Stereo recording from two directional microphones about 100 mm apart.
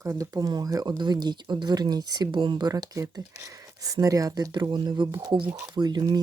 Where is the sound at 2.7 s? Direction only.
40° right (ahead or behind).